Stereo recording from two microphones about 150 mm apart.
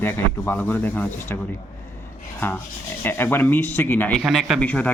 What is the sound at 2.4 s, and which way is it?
Speech, 15° left (ahead or behind).